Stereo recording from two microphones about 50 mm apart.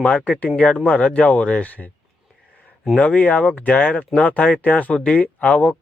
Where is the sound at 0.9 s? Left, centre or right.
Left.